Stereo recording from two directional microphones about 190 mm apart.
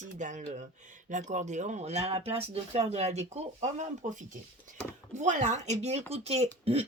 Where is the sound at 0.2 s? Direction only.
40° right (ahead or behind).